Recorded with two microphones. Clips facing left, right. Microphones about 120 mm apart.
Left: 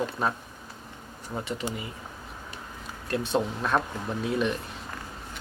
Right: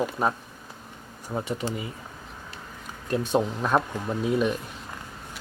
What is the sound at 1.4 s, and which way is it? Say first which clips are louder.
Speech: right 2 dB; 50° right (ahead or behind).